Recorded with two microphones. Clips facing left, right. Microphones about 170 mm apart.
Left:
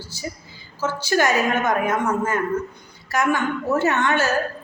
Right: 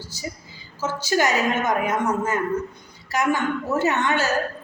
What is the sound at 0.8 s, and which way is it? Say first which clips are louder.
A woman's voice: left 1 dB; 20° right (ahead or behind).